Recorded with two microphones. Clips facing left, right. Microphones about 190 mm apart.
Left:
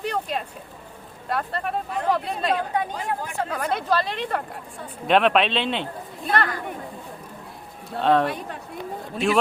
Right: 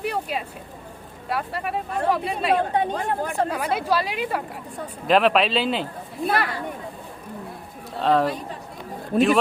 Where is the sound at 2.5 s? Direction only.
30° right (ahead or behind).